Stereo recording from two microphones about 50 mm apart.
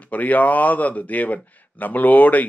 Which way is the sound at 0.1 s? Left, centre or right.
Left.